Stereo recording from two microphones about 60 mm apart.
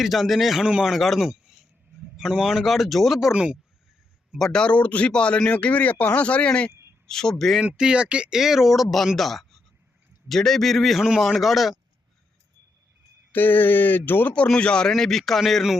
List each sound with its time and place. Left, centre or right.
0.0 s speech: centre
1.3 s a sound: centre
2.3 s speech: centre
3.3 s speech: centre
4.4 s speech: centre
4.6 s speech: left
7.1 s a man's voice: centre
7.6 s speech: centre
8.4 s speech: centre
13.3 s speech: left
14.3 s speech: centre